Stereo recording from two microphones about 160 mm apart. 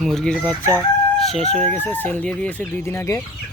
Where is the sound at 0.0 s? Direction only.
Centre (ahead or behind).